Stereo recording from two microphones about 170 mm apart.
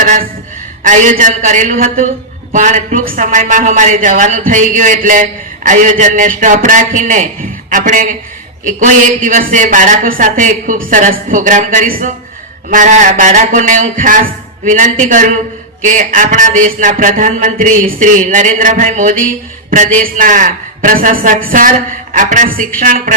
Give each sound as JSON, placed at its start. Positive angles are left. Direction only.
{"t": 0.0, "sound": "a sound", "side_deg": -50}
{"t": 0.9, "sound": "a woman's voice", "side_deg": -50}
{"t": 20.1, "sound": "a woman's voice", "side_deg": -50}